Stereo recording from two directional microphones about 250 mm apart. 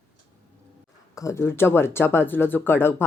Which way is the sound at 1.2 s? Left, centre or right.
Centre.